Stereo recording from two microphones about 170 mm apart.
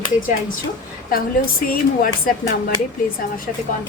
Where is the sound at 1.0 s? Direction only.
60° left (ahead or behind).